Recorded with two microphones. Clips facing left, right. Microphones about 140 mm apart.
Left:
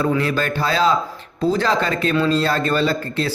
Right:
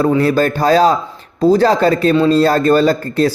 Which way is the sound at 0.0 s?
40° right (ahead or behind).